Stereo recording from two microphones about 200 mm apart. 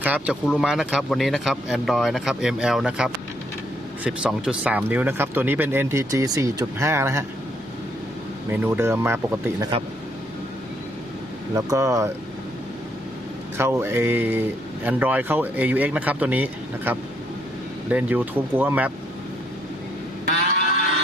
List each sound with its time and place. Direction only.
0.0 s speech: 5° right (ahead or behind)
8.4 s speech: 10° right (ahead or behind)
11.5 s speech: 15° right (ahead or behind)
13.6 s speech: 15° right (ahead or behind)